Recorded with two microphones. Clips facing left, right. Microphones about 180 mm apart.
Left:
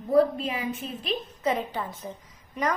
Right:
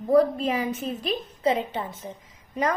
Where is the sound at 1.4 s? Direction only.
25° right (ahead or behind).